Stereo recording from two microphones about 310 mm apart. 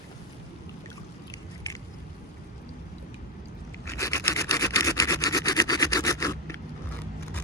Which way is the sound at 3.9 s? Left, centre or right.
Centre.